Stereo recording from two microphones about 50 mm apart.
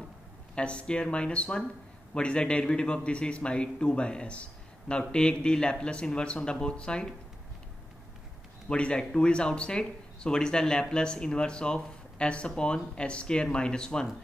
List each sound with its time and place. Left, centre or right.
0.6 s a man's voice: left
8.6 s speech: left